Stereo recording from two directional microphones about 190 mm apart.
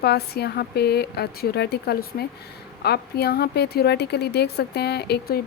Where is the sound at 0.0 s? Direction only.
60° left (ahead or behind).